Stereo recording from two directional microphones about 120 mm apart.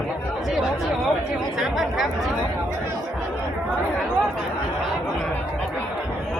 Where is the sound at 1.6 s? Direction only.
Centre (ahead or behind).